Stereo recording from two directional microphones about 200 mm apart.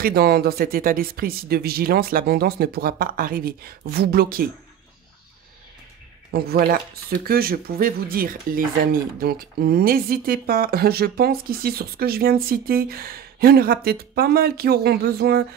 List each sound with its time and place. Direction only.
0.0 s speech: 50° right (ahead or behind)
6.3 s speech: 50° right (ahead or behind)